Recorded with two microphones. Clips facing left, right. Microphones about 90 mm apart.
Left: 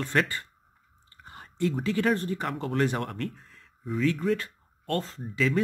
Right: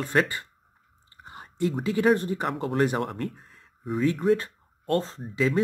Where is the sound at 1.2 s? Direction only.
20° right (ahead or behind).